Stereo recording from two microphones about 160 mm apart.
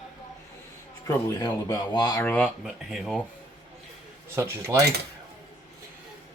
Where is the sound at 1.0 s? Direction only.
20° left (ahead or behind).